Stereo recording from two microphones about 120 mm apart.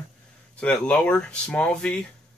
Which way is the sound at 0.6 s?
10° left (ahead or behind).